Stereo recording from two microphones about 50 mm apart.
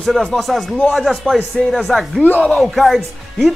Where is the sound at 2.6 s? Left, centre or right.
Centre.